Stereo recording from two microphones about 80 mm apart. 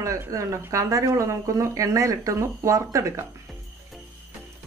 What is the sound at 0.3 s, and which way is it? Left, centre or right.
A woman's voice, right.